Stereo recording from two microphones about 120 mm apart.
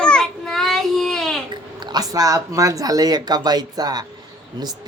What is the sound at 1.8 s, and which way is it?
Speech, 35° right (ahead or behind).